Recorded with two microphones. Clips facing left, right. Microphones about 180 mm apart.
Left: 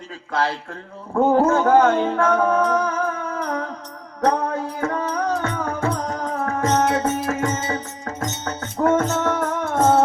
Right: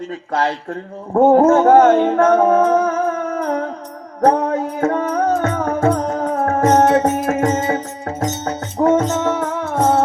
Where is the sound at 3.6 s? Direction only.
30° right (ahead or behind).